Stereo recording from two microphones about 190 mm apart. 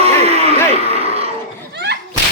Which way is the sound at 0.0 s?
35° right (ahead or behind).